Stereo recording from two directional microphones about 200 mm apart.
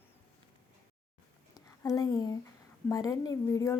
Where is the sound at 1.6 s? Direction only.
15° left (ahead or behind).